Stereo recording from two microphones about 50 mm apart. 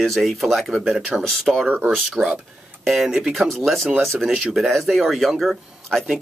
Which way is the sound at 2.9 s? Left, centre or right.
Centre.